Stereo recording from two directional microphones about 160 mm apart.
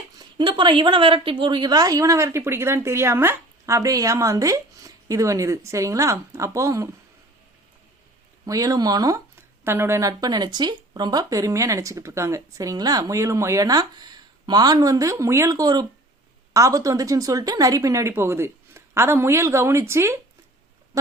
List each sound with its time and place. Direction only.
0.2 s a woman's voice: 30° right (ahead or behind)
8.4 s a woman's voice: 20° right (ahead or behind)
20.9 s quack: 20° right (ahead or behind)